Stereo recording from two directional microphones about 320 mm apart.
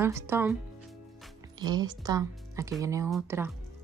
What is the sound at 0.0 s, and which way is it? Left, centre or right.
Speech, centre.